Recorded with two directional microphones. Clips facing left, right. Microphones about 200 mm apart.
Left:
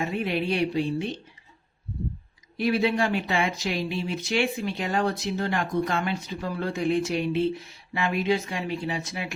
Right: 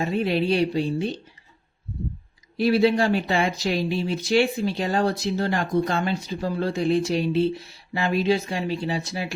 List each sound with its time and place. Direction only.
0.0 s speech: 35° right (ahead or behind)
2.6 s speech: 35° right (ahead or behind)